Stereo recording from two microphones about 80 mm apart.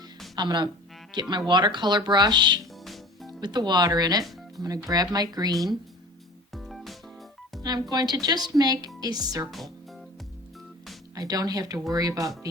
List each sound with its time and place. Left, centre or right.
0.3 s speech: right
2.8 s music: centre
3.4 s speech: right
6.5 s music: centre
7.6 s speech: right
9.5 s speech: centre
11.1 s speech: right